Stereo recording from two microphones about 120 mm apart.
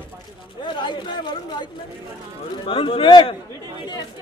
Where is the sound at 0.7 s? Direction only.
40° left (ahead or behind).